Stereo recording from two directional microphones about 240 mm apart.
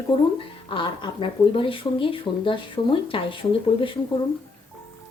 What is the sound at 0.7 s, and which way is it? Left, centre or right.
A woman's voice, left.